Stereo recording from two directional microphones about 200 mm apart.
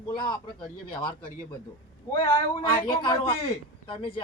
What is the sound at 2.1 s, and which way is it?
A man's voice, 25° left (ahead or behind).